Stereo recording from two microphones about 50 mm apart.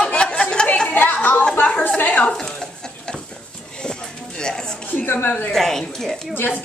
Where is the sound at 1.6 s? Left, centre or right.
Left.